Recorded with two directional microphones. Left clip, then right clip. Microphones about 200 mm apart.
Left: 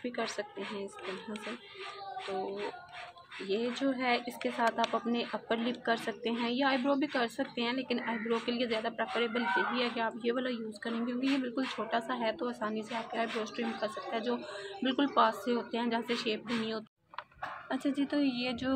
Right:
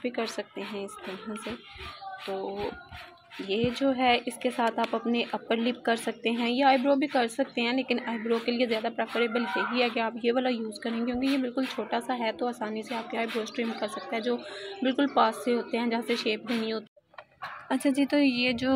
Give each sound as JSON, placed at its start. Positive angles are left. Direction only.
{"t": 0.0, "sound": "a woman's voice", "side_deg": -25}
{"t": 3.4, "sound": "a woman's voice", "side_deg": -25}